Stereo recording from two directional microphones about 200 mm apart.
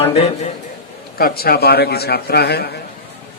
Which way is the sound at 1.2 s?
50° left (ahead or behind).